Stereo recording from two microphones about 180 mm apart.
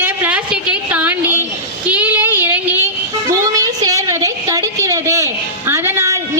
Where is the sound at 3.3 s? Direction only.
20° right (ahead or behind).